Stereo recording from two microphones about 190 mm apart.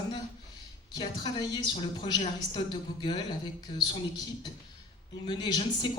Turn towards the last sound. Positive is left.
turn(degrees=20)  # may be behind; listen again after turning